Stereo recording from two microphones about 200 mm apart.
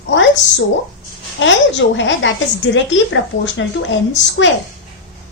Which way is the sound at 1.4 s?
65° left (ahead or behind).